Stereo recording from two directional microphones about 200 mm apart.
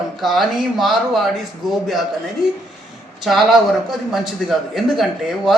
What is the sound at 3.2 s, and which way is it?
A man's voice, centre (ahead or behind).